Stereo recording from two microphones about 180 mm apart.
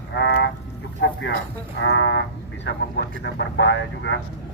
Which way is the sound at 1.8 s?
70° left (ahead or behind).